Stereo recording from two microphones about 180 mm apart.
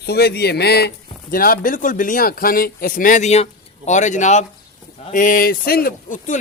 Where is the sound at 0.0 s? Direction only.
65° left (ahead or behind).